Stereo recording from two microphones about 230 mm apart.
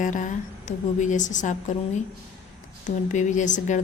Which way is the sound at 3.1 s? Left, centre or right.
Left.